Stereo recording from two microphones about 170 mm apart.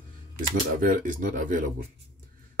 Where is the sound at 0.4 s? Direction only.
50° right (ahead or behind).